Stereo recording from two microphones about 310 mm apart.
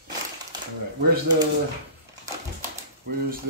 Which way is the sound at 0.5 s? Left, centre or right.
Centre.